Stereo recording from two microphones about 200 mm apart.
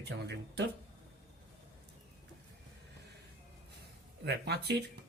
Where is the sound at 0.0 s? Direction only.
55° right (ahead or behind).